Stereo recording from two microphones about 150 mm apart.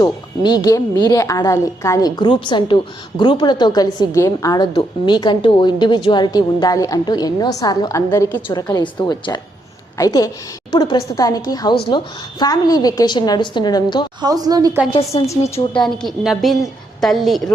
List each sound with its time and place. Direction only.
0.0 s a woman's voice: 25° left (ahead or behind)
14.2 s a woman's voice: 25° right (ahead or behind)
15.8 s a woman's voice: centre (ahead or behind)